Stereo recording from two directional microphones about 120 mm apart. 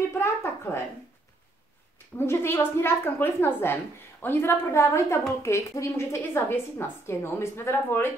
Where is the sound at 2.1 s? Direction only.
20° left (ahead or behind).